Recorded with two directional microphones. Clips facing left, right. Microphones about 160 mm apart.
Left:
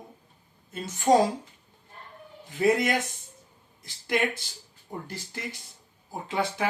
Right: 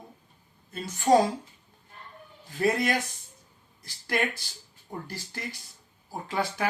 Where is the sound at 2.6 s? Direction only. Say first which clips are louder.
Left 2 dB; 20° left (ahead or behind).